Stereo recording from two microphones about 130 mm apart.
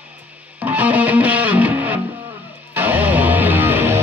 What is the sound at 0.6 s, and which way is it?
Music, 10° right (ahead or behind).